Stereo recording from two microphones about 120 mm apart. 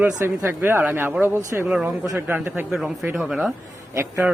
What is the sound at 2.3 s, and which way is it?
Speech, 15° right (ahead or behind).